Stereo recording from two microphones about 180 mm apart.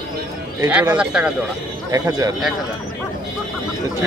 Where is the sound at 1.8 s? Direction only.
20° right (ahead or behind).